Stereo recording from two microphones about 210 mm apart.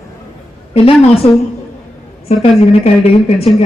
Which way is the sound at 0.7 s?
30° left (ahead or behind).